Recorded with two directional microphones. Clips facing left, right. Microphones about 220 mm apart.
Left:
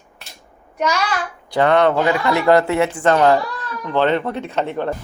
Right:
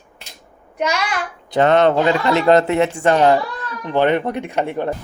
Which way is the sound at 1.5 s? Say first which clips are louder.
Right 1 dB; 20° right (ahead or behind).